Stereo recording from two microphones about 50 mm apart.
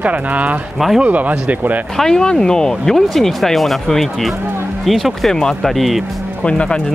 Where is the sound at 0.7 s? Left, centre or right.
Centre.